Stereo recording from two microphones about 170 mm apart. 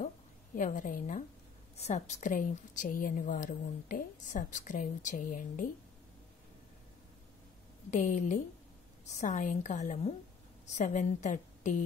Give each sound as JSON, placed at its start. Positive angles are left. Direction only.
{"t": 0.6, "sound": "a woman's voice", "side_deg": 50}
{"t": 1.8, "sound": "a woman's voice", "side_deg": 40}
{"t": 7.9, "sound": "a woman's voice", "side_deg": 45}